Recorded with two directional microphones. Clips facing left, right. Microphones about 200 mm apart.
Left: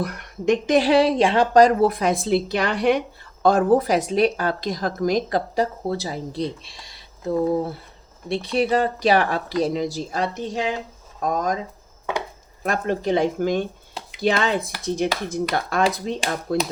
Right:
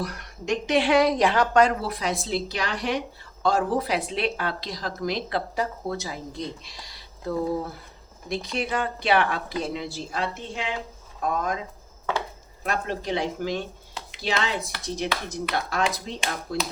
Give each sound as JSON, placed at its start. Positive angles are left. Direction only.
{"t": 0.0, "sound": "a woman's voice", "side_deg": 55}
{"t": 0.8, "sound": "speech", "side_deg": 35}
{"t": 1.6, "sound": "a woman's voice", "side_deg": 50}
{"t": 12.6, "sound": "speech", "side_deg": 50}